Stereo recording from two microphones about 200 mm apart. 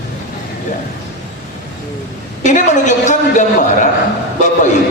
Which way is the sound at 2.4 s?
40° left (ahead or behind).